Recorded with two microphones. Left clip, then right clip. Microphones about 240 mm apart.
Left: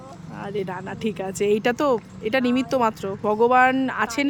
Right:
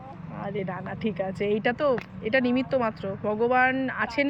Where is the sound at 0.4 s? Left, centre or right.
Centre.